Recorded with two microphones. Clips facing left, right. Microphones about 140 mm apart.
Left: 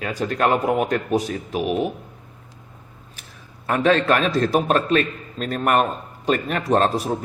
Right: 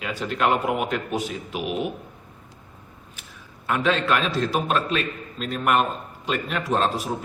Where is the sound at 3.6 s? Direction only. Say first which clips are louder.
Left 5 dB; 40° left (ahead or behind).